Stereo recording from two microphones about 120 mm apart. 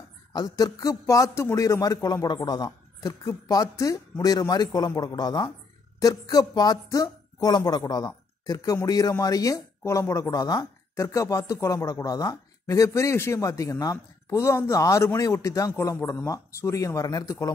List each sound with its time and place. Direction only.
0.3 s speech: 35° left (ahead or behind)